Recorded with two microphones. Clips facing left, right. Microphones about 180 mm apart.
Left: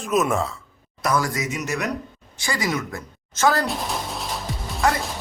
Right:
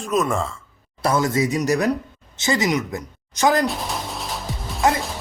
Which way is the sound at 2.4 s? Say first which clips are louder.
Right 5 dB; 20° right (ahead or behind).